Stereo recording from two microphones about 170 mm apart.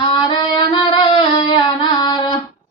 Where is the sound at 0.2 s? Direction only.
25° left (ahead or behind).